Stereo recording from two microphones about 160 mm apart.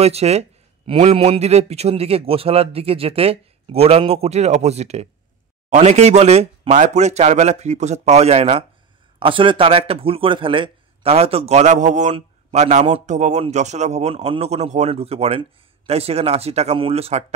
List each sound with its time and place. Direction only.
0.0 s speech: 40° right (ahead or behind)